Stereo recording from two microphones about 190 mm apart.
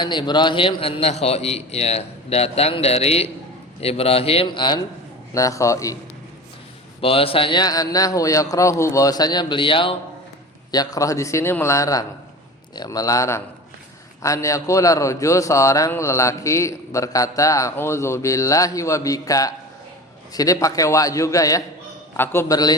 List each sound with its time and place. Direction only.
0.0 s a man's voice: 25° left (ahead or behind)
7.0 s a man's voice: 30° left (ahead or behind)